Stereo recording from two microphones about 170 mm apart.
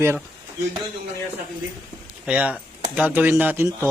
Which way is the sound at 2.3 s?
5° right (ahead or behind).